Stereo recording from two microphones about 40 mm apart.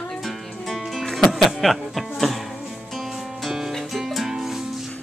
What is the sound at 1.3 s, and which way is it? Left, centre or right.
Speech, centre.